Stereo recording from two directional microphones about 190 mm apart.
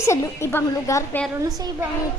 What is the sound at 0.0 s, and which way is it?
A woman's voice, 15° left (ahead or behind).